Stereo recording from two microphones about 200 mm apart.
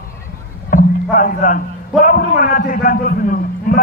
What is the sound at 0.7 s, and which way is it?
Music, 45° left (ahead or behind).